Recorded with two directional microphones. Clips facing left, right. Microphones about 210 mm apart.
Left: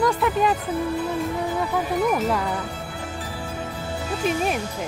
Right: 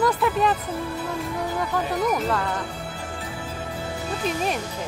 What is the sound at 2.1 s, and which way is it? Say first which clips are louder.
Speech: left 2 dB; 10° left (ahead or behind).